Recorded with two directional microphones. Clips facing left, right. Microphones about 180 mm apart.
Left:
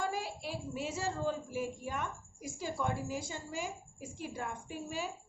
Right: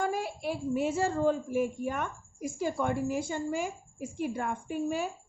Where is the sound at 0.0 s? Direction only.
55° right (ahead or behind).